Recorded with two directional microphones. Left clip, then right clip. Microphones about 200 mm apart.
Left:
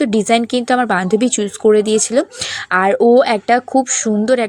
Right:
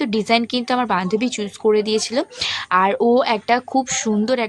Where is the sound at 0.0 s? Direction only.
15° left (ahead or behind).